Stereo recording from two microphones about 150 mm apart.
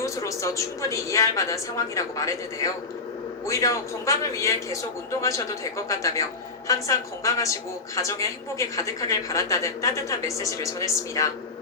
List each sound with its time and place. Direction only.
0.0 s a woman's voice: 20° left (ahead or behind)